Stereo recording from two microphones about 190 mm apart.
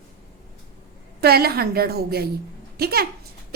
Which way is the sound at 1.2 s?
55° right (ahead or behind).